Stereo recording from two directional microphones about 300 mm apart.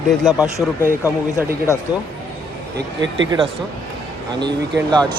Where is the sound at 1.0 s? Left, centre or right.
Centre.